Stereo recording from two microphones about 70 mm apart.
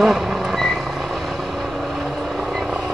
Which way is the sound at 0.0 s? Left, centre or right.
Centre.